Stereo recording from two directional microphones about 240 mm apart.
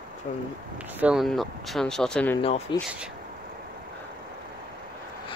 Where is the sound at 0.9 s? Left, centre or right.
Centre.